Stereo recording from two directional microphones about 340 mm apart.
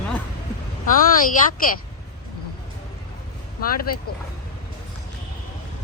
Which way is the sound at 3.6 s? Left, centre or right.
Left.